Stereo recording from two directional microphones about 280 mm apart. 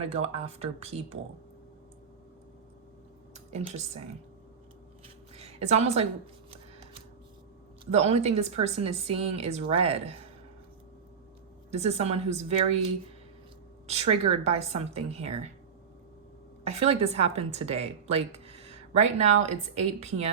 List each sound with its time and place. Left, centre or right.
0.1 s a woman's voice: right
3.3 s speech: right
5.3 s a sound: right
7.9 s a woman's voice: right
11.7 s a woman's voice: right
13.8 s a woman's voice: right
16.6 s a woman's voice: right